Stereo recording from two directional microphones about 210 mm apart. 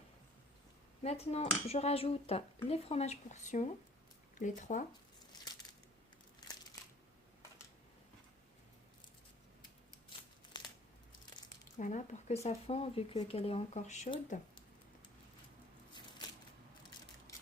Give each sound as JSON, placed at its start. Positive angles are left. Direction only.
{"t": 1.0, "sound": "speech", "side_deg": 30}
{"t": 10.1, "sound": "scissors", "side_deg": 20}
{"t": 11.8, "sound": "speech", "side_deg": 35}
{"t": 16.2, "sound": "a sound", "side_deg": 20}